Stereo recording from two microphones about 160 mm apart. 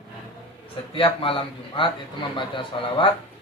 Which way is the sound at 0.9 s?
35° left (ahead or behind).